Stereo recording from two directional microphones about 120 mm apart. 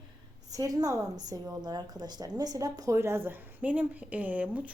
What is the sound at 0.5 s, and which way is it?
A woman's voice, 30° right (ahead or behind).